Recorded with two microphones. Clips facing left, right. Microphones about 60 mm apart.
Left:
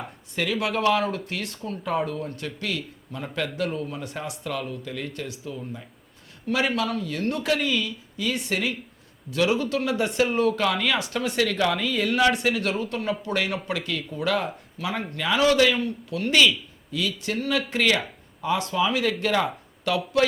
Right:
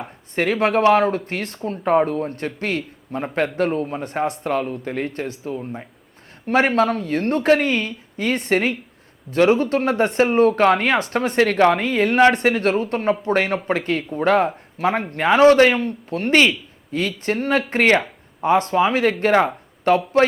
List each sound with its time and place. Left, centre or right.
0.3 s speech: right